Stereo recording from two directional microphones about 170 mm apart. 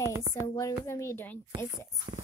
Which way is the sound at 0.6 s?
20° left (ahead or behind).